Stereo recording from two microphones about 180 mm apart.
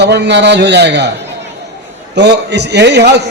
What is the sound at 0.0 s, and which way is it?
A man's voice, 70° right (ahead or behind).